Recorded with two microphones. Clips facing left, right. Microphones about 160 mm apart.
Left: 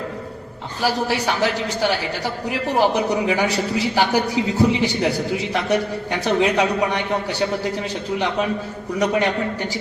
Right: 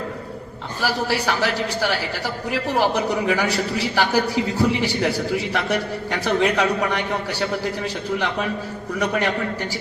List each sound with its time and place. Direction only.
0.8 s a woman's voice: 20° left (ahead or behind)
9.0 s a woman's voice: 20° left (ahead or behind)